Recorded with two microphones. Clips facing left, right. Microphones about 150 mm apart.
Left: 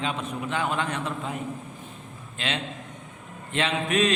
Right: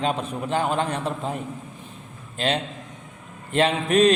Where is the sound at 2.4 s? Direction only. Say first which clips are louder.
Right 6 dB; 40° right (ahead or behind).